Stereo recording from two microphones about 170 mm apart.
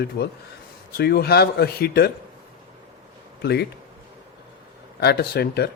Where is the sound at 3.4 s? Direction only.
75° left (ahead or behind).